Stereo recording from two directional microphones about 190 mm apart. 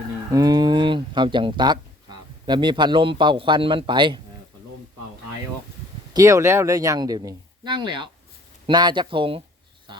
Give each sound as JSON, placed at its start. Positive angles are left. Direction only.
{"t": 0.3, "sound": "speech", "side_deg": -20}
{"t": 6.1, "sound": "speech", "side_deg": -15}